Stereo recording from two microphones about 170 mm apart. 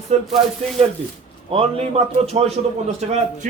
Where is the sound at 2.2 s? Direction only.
35° right (ahead or behind).